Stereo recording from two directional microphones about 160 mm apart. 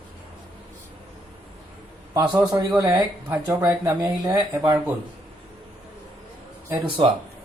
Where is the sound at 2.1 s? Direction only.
25° right (ahead or behind).